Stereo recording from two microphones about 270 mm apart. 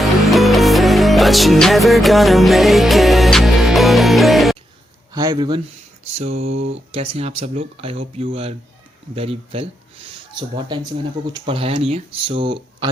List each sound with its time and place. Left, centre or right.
0.0 s music: centre
5.1 s speech: centre
6.3 s a sound: right
6.7 s speech: right